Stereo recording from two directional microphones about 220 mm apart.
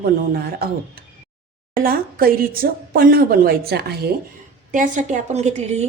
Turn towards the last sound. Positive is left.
turn(degrees=-30)  # may be behind; listen again after turning